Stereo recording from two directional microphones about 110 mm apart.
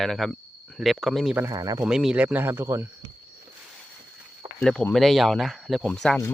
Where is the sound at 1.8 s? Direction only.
5° right (ahead or behind); by 2.8 s 25° right (ahead or behind).